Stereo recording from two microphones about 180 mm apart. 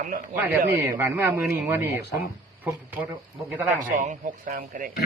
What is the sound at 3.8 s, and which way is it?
Speech, 45° right (ahead or behind).